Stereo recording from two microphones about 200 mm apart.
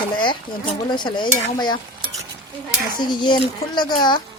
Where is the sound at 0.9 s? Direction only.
20° left (ahead or behind).